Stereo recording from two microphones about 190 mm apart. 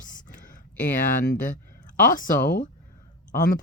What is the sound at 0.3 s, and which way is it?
Speech, 45° left (ahead or behind).